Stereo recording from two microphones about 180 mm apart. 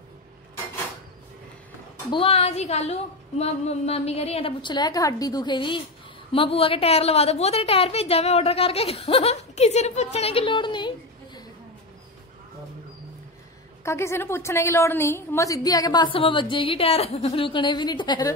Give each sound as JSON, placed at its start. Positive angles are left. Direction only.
{"t": 2.1, "sound": "a woman's voice", "side_deg": 30}
{"t": 13.8, "sound": "a woman's voice", "side_deg": 15}